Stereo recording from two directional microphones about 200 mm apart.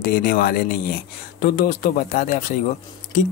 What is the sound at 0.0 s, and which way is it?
A man's voice, 50° left (ahead or behind).